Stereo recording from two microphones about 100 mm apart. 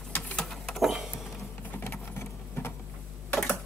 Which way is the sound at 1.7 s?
20° left (ahead or behind).